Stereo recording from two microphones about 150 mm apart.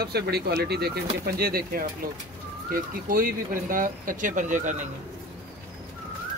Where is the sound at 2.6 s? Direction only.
70° right (ahead or behind).